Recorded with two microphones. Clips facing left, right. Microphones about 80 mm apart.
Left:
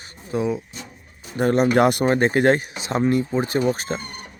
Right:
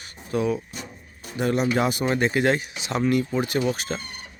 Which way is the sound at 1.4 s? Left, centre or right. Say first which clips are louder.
Left 5 dB; left.